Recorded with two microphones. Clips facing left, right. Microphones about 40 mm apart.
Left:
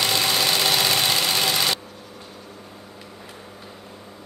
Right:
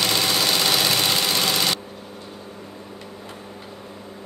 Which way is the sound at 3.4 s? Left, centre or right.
Centre.